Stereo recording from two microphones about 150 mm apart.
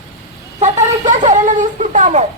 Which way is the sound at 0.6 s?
55° right (ahead or behind).